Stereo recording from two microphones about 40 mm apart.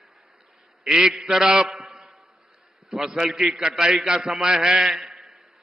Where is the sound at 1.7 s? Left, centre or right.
Centre.